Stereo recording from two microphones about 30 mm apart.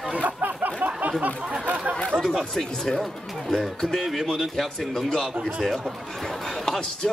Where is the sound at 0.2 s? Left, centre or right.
Right.